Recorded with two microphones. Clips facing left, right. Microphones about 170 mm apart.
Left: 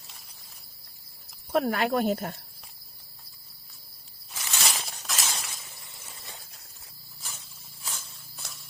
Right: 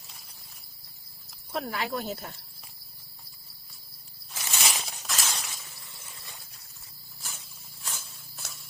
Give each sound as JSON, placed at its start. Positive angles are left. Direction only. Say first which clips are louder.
{"t": 1.5, "sound": "speech", "louder": "left 7 dB", "side_deg": 55}
{"t": 4.3, "sound": "snake", "louder": "even", "side_deg": 0}
{"t": 5.0, "sound": "shatter", "louder": "even", "side_deg": 0}
{"t": 7.2, "sound": "a sound", "louder": "even", "side_deg": 0}